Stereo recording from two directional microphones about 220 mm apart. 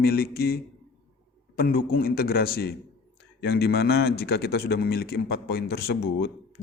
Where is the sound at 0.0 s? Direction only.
45° left (ahead or behind).